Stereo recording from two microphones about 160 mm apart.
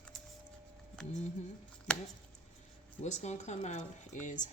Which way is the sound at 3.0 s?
45° left (ahead or behind).